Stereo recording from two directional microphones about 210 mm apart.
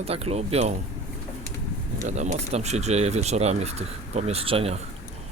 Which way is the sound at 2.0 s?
35° right (ahead or behind).